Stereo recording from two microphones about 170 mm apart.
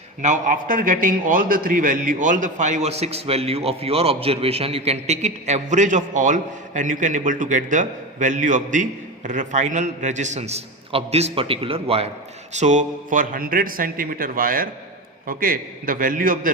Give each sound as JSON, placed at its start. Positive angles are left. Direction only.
{"t": 0.2, "sound": "a man's voice", "side_deg": -45}